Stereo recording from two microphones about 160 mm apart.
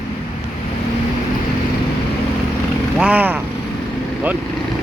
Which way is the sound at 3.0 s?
10° right (ahead or behind).